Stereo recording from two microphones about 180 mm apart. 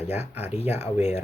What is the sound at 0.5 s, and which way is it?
Speech, 35° left (ahead or behind).